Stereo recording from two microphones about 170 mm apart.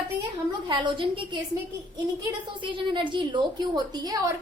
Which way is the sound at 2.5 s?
30° right (ahead or behind).